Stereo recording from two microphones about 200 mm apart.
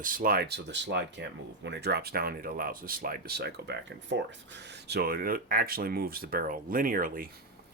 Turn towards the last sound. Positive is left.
turn(degrees=-45)  # may be behind; listen again after turning